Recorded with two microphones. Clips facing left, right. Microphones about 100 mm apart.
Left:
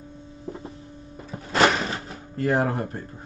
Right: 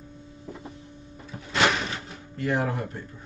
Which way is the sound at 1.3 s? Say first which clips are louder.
Left 4 dB; 40° left (ahead or behind).